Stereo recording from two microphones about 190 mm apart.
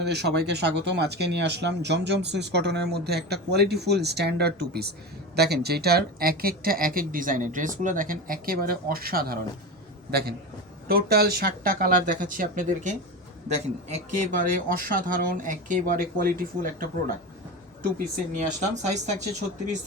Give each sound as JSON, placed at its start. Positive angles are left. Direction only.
{"t": 0.0, "sound": "speech", "side_deg": -60}
{"t": 17.9, "sound": "speech", "side_deg": -40}